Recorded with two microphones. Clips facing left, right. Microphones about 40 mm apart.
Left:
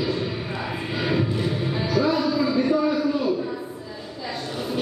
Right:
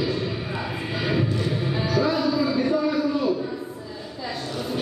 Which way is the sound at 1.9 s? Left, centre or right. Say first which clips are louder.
Left 1 dB; centre.